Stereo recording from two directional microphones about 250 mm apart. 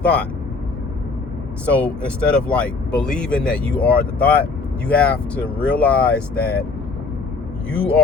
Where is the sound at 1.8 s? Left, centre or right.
Centre.